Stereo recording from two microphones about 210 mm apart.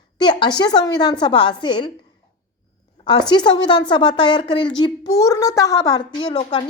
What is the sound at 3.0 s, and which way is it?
A woman's voice, 20° left (ahead or behind).